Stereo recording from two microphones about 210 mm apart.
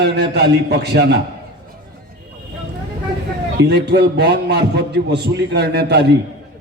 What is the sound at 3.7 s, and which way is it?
A man's voice, 55° right (ahead or behind).